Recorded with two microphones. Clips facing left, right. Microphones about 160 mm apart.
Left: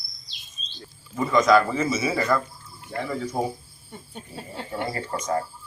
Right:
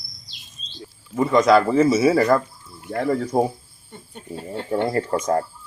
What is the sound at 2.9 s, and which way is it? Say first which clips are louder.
Speech: right 7 dB; 50° right (ahead or behind).